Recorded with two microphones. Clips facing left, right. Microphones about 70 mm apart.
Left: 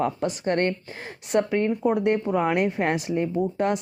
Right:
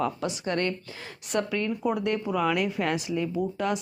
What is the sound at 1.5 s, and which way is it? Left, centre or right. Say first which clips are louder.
Speech: left 5 dB; left.